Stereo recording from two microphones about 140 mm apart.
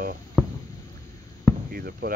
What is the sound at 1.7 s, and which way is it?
Speech, 90° right.